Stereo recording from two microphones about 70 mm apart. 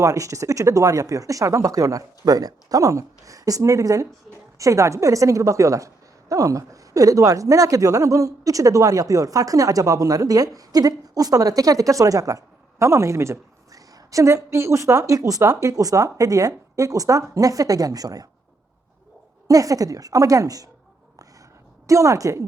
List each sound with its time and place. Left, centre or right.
0.0 s a woman's voice: right
12.8 s speech: right
13.7 s a woman's voice: right
19.5 s a woman's voice: right
21.8 s speech: right